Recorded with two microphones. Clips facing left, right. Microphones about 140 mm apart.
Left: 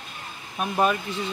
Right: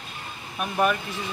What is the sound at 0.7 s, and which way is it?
Speech, 25° left (ahead or behind).